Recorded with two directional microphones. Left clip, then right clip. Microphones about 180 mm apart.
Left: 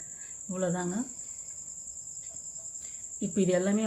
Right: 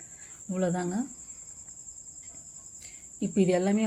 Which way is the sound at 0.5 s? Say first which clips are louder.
Right 2 dB; 15° right (ahead or behind).